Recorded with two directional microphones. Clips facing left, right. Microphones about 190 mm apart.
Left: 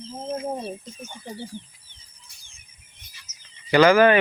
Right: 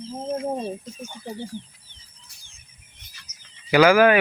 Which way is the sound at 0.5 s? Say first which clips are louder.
Right 3 dB; 20° right (ahead or behind).